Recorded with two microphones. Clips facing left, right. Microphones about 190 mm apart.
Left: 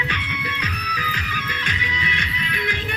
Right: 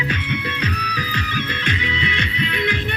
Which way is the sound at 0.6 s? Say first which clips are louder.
Right 5 dB; 30° right (ahead or behind).